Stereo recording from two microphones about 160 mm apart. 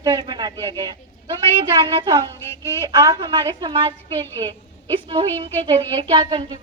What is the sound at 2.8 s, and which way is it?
Speech, 25° right (ahead or behind).